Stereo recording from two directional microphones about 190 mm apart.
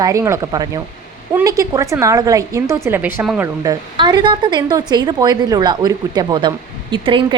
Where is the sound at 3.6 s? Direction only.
20° right (ahead or behind).